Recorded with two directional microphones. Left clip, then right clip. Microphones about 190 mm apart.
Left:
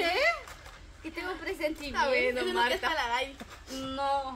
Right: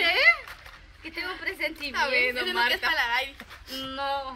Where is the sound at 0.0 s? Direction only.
30° left (ahead or behind).